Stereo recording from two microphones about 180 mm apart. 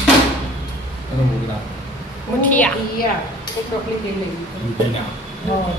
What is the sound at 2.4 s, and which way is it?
Speech, 10° left (ahead or behind).